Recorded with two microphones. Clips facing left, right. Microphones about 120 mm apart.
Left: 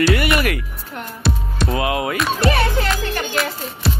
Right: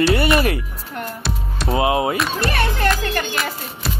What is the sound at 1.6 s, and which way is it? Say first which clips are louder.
Speech: right 3 dB; 25° right (ahead or behind).